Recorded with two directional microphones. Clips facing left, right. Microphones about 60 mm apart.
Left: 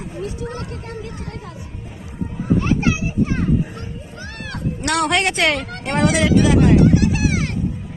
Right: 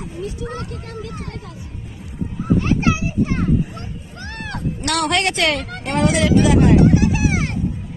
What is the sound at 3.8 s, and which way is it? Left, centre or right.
Music, right.